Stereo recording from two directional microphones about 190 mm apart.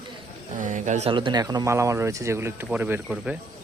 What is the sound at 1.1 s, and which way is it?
Speech, 25° right (ahead or behind).